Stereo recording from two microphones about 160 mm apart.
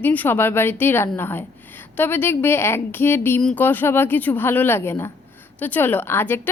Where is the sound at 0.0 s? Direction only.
10° left (ahead or behind).